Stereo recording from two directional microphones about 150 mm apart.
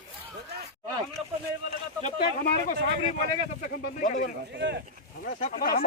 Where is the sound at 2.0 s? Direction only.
60° left (ahead or behind).